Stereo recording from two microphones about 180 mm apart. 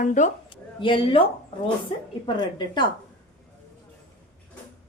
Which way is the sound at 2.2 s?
25° left (ahead or behind).